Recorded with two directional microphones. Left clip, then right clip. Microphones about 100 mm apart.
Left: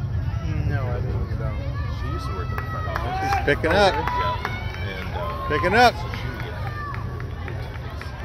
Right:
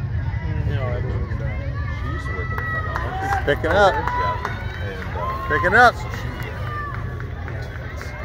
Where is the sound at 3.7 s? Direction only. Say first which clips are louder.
Right 3 dB; 60° left (ahead or behind).